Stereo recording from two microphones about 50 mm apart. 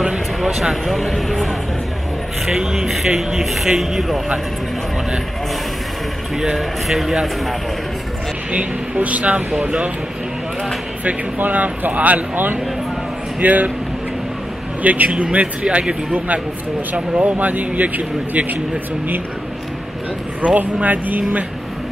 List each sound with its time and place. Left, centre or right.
0.4 s a sound: centre
0.8 s speech: centre
2.4 s speech: centre
6.4 s speech: centre
8.5 s speech: right
11.1 s speech: right
14.8 s a man's voice: right
17.2 s speech: right
20.4 s speech: right